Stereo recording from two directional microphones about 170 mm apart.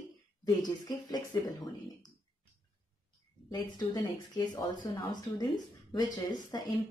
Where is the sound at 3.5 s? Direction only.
25° left (ahead or behind).